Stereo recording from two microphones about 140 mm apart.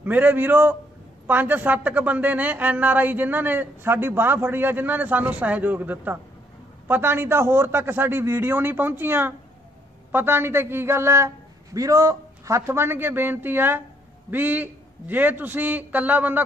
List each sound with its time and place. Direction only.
0.0 s a woman's voice: 10° right (ahead or behind)